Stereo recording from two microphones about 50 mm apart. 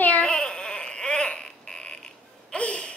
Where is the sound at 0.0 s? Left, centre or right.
Left.